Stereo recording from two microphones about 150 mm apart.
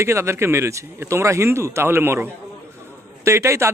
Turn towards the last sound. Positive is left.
turn(degrees=-20)  # may be behind; listen again after turning